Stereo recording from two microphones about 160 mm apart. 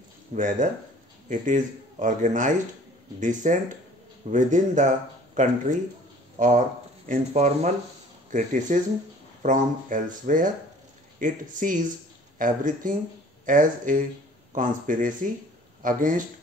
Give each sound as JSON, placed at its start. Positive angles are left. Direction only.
{"t": 0.3, "sound": "speech", "side_deg": -50}